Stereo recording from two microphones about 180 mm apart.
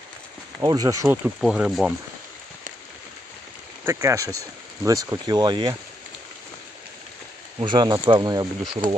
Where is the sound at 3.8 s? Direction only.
15° right (ahead or behind).